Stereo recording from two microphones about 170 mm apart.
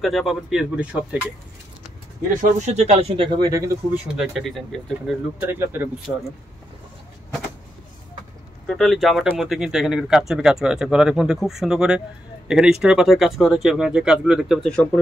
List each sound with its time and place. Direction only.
0.0 s speech: centre (ahead or behind)
2.4 s speech: 40° right (ahead or behind); by 5.1 s centre (ahead or behind)
5.5 s speech: 15° right (ahead or behind)
8.6 s speech: centre (ahead or behind)